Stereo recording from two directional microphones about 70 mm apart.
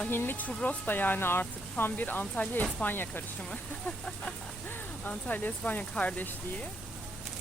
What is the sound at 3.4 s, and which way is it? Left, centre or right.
Speech, centre.